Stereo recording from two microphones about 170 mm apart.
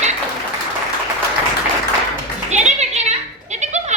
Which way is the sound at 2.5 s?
40° right (ahead or behind).